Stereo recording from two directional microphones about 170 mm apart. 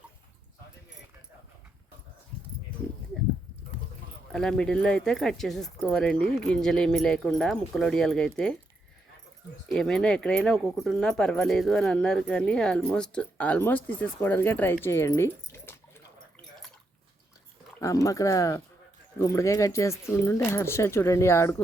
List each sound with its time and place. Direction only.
4.3 s speech: 5° left (ahead or behind)
9.6 s speech: 5° left (ahead or behind)
17.7 s speech: 20° left (ahead or behind)